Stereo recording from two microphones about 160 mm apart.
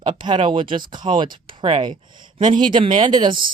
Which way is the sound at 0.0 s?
30° right (ahead or behind).